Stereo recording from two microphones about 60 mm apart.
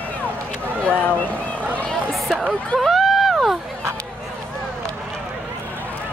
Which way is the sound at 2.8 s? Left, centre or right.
Centre.